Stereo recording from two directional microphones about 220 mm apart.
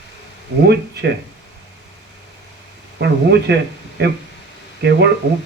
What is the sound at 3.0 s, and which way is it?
Speech, 50° right (ahead or behind).